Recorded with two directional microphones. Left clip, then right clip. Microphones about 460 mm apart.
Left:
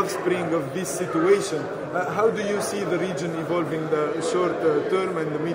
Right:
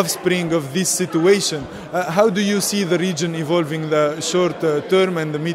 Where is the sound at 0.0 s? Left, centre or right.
Right.